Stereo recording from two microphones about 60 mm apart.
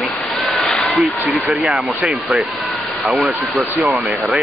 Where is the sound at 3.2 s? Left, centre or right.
Right.